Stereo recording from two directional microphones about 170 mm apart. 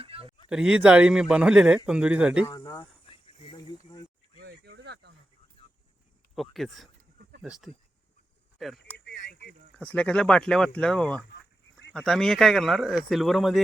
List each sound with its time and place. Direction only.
0.0 s a sound: 35° right (ahead or behind)
0.5 s speech: 5° right (ahead or behind)
2.5 s speech: 20° left (ahead or behind)
3.2 s snake: 30° left (ahead or behind)
4.4 s a sound: 80° right
6.3 s speech: centre (ahead or behind)
8.5 s speech: centre (ahead or behind)
8.8 s a sound: 85° left
9.7 s speech: 10° left (ahead or behind)